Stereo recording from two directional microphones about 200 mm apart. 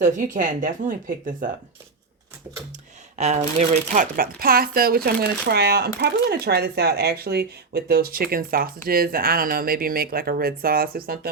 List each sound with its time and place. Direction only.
0.0 s speech: 40° right (ahead or behind)
3.2 s speech: 35° right (ahead or behind); by 11.3 s 50° right (ahead or behind)